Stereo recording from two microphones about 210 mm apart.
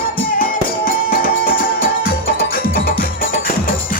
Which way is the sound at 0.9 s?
45° left (ahead or behind).